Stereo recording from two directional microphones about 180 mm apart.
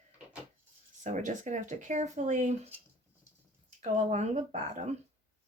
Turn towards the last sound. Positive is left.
turn(degrees=-40)  # may be behind; listen again after turning